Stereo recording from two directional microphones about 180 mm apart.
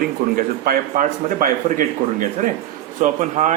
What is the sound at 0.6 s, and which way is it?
Speech, 45° right (ahead or behind).